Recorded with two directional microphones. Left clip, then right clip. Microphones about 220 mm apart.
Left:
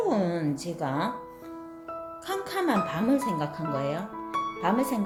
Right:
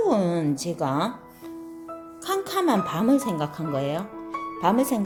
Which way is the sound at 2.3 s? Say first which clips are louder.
Right 5 dB; 35° right (ahead or behind).